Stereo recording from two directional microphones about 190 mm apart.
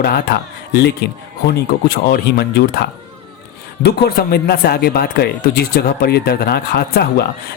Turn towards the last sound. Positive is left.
turn(degrees=55)  # may be behind; listen again after turning